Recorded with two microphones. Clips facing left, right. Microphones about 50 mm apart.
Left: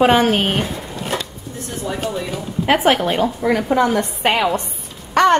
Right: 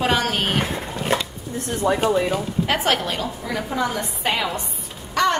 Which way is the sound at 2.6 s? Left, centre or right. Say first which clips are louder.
Left 9 dB; centre.